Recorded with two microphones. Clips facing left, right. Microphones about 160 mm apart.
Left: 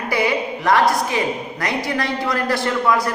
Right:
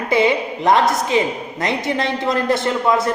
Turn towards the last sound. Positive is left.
turn(degrees=-25)  # may be behind; listen again after turning